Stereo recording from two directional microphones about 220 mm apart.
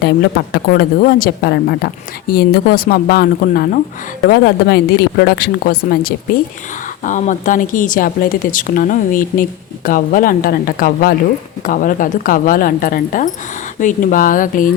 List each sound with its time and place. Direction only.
0.0 s a woman's voice: 45° left (ahead or behind)